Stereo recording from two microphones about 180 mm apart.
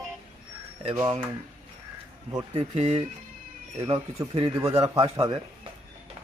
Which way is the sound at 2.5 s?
30° right (ahead or behind).